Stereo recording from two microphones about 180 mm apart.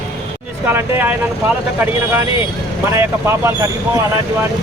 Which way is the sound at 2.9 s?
15° right (ahead or behind).